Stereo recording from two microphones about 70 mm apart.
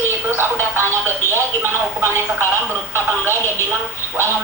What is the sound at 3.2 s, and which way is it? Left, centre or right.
Speech, right.